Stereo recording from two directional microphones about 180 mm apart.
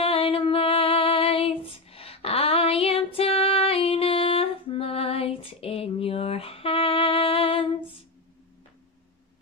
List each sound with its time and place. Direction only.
0.0 s female singing: 30° left (ahead or behind)